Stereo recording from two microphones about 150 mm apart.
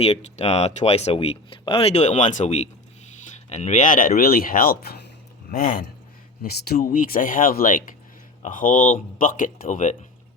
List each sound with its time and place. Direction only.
0.0 s speech: 45° left (ahead or behind)